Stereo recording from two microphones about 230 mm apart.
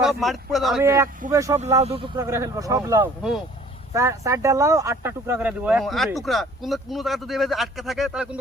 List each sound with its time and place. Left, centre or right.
0.0 s speech: centre
0.8 s speech: centre
1.8 s speech: right
2.1 s speech: centre